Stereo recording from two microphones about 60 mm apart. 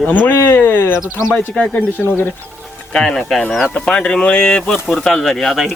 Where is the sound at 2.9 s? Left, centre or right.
Centre.